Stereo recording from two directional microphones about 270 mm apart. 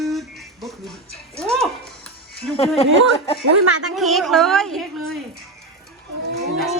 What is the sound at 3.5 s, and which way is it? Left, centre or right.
Speech, right.